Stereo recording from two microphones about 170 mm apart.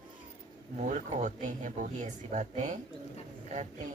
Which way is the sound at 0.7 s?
50° right (ahead or behind).